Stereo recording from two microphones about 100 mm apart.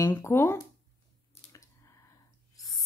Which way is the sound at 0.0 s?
25° left (ahead or behind).